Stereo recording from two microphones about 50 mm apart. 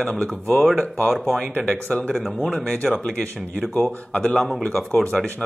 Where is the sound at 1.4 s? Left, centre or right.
Centre.